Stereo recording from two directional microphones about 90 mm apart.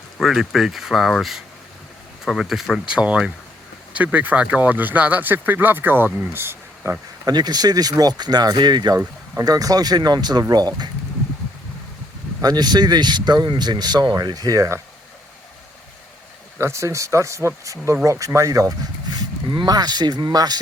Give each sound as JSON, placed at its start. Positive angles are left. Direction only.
{"t": 0.2, "sound": "speech", "side_deg": -5}
{"t": 7.3, "sound": "speech", "side_deg": -50}
{"t": 9.4, "sound": "speech", "side_deg": -45}
{"t": 12.4, "sound": "speech", "side_deg": -50}
{"t": 16.6, "sound": "speech", "side_deg": -35}
{"t": 19.1, "sound": "speech", "side_deg": -55}